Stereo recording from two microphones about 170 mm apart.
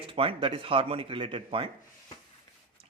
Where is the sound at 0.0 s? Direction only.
30° right (ahead or behind).